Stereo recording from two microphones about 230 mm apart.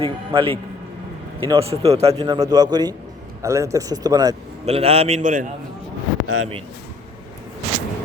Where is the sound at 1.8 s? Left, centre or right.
Right.